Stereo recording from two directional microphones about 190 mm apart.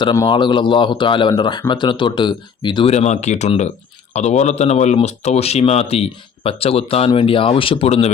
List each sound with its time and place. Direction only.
0.0 s speech: 25° left (ahead or behind)